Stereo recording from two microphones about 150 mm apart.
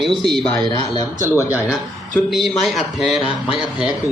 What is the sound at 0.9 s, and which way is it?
Speech, 20° left (ahead or behind).